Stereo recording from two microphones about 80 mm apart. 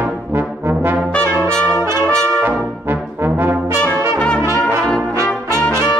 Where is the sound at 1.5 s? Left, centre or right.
Centre.